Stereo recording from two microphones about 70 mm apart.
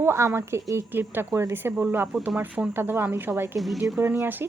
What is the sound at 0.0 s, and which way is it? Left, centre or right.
Speech, right.